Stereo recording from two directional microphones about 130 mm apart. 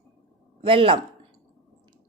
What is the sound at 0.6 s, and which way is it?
Speech, 45° right (ahead or behind).